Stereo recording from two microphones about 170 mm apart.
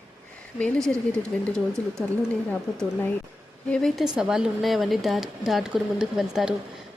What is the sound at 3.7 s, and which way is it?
A woman's voice, 5° left (ahead or behind).